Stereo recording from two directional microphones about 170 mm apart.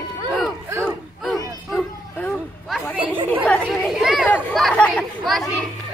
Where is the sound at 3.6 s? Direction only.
5° right (ahead or behind).